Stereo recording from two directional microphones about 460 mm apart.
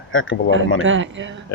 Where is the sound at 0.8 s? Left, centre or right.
Right.